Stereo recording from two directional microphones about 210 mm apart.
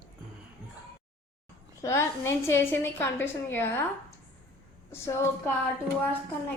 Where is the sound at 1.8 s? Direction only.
15° left (ahead or behind).